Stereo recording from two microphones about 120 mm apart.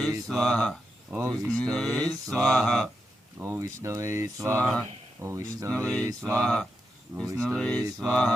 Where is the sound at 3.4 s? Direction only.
20° right (ahead or behind).